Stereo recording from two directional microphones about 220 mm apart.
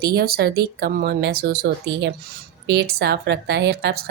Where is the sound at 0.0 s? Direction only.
45° right (ahead or behind).